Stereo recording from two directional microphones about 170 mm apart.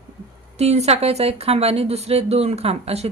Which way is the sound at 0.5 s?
40° right (ahead or behind).